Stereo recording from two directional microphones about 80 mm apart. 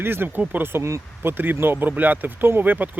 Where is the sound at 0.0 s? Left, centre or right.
Right.